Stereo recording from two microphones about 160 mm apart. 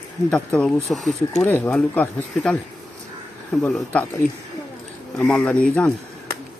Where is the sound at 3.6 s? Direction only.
10° left (ahead or behind).